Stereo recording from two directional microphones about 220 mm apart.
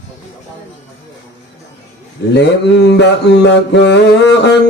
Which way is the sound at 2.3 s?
50° left (ahead or behind).